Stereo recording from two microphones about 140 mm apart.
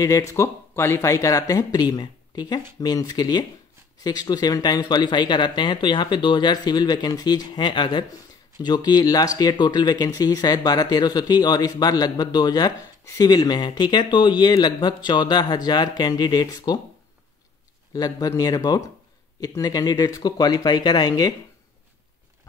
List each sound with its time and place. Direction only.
0.0 s speech: 20° left (ahead or behind)
17.9 s speech: 25° left (ahead or behind)